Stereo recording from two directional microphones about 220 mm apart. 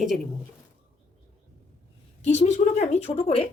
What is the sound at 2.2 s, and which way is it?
A woman's voice, 30° left (ahead or behind).